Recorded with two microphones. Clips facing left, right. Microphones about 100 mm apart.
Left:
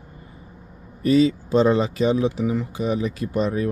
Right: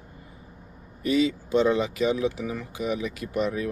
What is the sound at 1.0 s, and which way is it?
Speech, 40° left (ahead or behind).